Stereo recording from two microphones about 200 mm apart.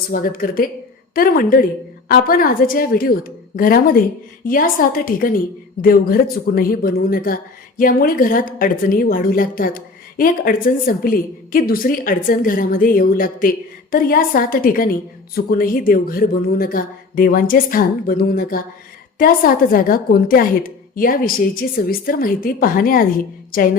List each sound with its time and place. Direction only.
0.1 s a woman's voice: 45° left (ahead or behind)